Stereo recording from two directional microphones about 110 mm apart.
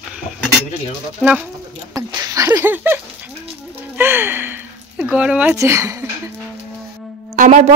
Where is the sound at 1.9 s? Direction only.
35° right (ahead or behind); by 3.0 s 15° right (ahead or behind).